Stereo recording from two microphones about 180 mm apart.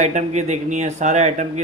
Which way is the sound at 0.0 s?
40° right (ahead or behind).